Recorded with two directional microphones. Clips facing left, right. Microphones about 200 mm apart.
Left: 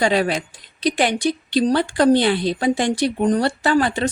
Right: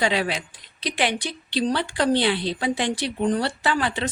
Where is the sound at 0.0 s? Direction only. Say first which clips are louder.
Left 5 dB; 45° left (ahead or behind).